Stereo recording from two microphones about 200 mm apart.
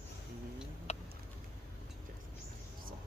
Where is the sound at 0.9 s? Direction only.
35° left (ahead or behind).